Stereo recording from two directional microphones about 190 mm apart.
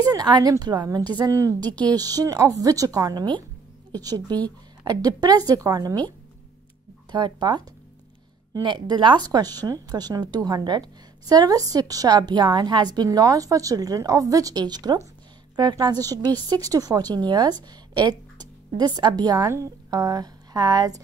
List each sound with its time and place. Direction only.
0.0 s a woman's voice: 20° right (ahead or behind)
7.1 s a woman's voice: 25° right (ahead or behind)